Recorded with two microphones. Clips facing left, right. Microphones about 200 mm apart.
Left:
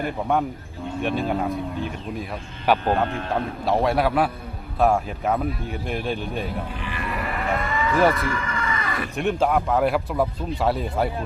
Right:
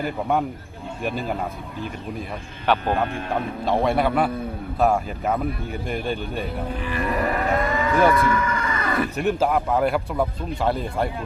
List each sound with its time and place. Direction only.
0.0 s speech: centre (ahead or behind)
2.7 s speech: 10° left (ahead or behind)
6.8 s livestock: 40° right (ahead or behind)
9.1 s speech: centre (ahead or behind)